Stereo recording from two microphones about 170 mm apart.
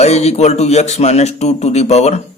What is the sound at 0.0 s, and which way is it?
A man's voice, 40° left (ahead or behind).